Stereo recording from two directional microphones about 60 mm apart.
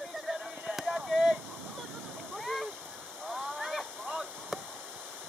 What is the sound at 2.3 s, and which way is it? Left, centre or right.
Splash, centre.